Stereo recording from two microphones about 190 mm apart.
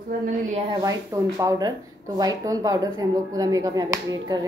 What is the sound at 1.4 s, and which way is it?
A woman's voice, 20° right (ahead or behind).